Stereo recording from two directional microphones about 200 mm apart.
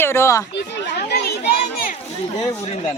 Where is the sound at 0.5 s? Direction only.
55° left (ahead or behind).